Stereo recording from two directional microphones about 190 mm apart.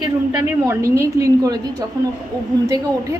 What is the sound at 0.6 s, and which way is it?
Speech, 15° right (ahead or behind).